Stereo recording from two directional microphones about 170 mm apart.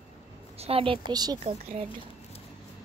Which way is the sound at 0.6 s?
35° right (ahead or behind).